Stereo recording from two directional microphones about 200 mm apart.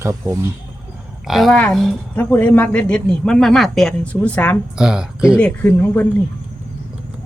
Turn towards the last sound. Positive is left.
turn(degrees=10)  # may be behind; listen again after turning